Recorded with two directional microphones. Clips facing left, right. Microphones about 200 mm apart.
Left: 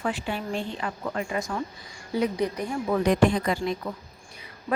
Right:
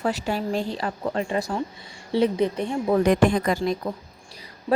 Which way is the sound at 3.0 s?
50° right (ahead or behind).